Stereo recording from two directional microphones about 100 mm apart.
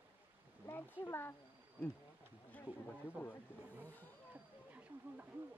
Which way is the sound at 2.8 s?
15° left (ahead or behind).